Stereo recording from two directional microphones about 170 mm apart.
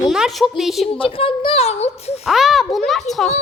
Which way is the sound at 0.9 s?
30° left (ahead or behind).